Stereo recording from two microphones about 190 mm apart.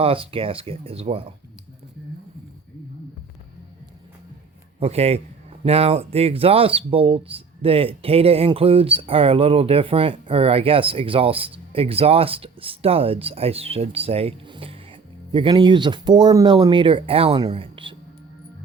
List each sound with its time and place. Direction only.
0.0 s speech: 30° right (ahead or behind)
4.8 s a man's voice: 35° right (ahead or behind)